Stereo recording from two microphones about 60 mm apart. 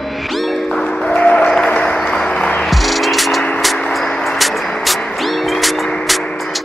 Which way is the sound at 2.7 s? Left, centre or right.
Centre.